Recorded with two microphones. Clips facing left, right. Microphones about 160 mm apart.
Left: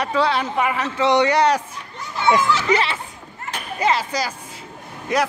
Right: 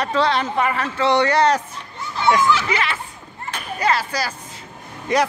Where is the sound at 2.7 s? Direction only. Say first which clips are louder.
Left 3 dB; 30° left (ahead or behind).